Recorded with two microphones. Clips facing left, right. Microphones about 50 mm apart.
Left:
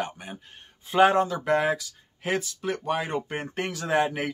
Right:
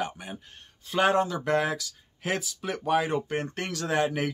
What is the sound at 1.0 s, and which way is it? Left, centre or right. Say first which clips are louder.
Speech: left 3 dB; centre.